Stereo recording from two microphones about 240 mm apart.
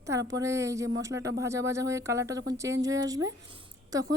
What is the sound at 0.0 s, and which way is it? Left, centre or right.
A woman's voice, centre.